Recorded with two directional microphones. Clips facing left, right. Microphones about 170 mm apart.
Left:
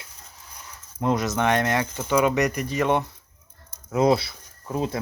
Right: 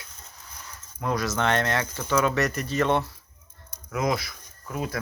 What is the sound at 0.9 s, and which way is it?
Speech, 20° left (ahead or behind).